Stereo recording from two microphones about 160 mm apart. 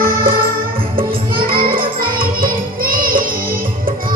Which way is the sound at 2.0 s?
65° right (ahead or behind).